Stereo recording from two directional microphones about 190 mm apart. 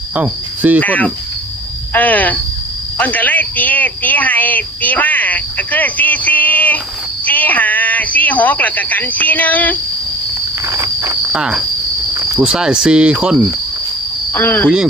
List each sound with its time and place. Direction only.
0.2 s cricket: 10° right (ahead or behind)
0.8 s speech: 10° left (ahead or behind)
10.7 s walk: 15° right (ahead or behind)
11.3 s cricket: 5° right (ahead or behind)
12.1 s speech: 5° right (ahead or behind)
14.3 s speech: 10° left (ahead or behind)